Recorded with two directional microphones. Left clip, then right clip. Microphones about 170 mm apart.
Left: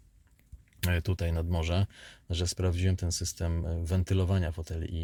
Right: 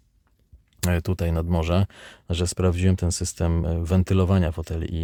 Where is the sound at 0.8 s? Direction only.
50° right (ahead or behind).